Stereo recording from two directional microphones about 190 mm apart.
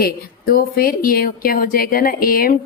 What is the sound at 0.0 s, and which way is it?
Speech, 50° left (ahead or behind).